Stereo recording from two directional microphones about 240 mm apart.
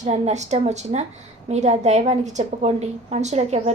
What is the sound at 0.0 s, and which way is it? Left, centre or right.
A woman's voice, right.